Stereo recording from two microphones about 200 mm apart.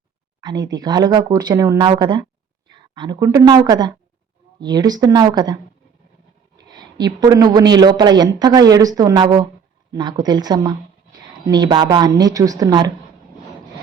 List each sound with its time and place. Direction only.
0.4 s a woman's voice: 20° right (ahead or behind)
6.6 s speech: 20° right (ahead or behind)